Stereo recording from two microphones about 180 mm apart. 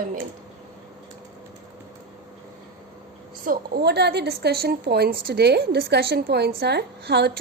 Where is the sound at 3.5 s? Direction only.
60° right (ahead or behind).